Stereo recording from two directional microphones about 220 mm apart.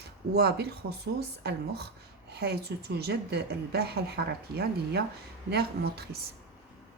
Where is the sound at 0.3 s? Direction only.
50° right (ahead or behind).